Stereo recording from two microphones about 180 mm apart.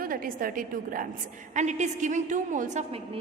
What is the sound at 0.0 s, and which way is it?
A woman's voice, 50° right (ahead or behind).